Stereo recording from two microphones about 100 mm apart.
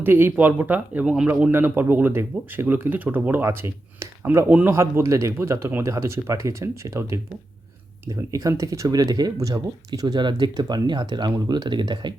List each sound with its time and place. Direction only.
0.0 s speech: 20° right (ahead or behind); by 12.1 s 50° right (ahead or behind)